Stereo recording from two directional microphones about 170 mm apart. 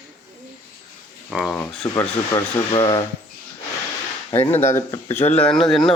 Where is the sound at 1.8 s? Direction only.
20° left (ahead or behind).